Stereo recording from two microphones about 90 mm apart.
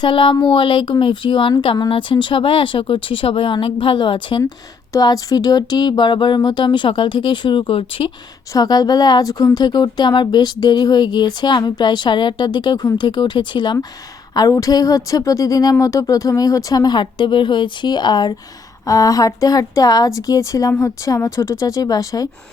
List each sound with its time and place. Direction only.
0.0 s speech: 65° left (ahead or behind)
4.9 s speech: 45° left (ahead or behind); by 8.1 s 85° left
8.5 s speech: 45° left (ahead or behind)
14.3 s a woman's voice: 40° left (ahead or behind); by 18.3 s 55° left (ahead or behind)
18.9 s a woman's voice: 40° left (ahead or behind)